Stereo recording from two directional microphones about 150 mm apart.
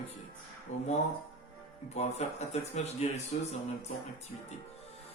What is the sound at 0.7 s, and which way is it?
Speech, 50° left (ahead or behind).